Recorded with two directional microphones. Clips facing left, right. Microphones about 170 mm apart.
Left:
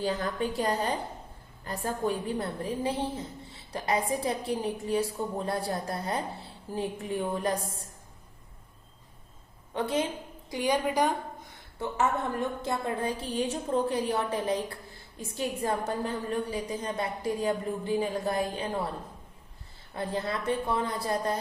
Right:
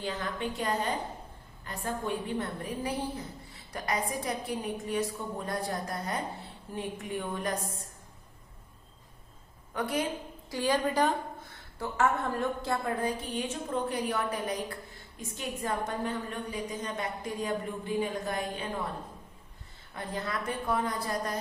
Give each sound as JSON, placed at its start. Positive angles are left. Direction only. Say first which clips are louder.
{"t": 0.0, "sound": "a woman's voice", "louder": "left 4 dB", "side_deg": 40}
{"t": 9.7, "sound": "a woman's voice", "louder": "left 2 dB", "side_deg": 25}
{"t": 19.9, "sound": "a woman's voice", "louder": "left 4 dB", "side_deg": 30}